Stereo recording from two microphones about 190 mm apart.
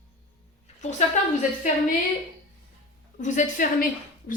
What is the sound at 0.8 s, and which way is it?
Speech, 40° left (ahead or behind).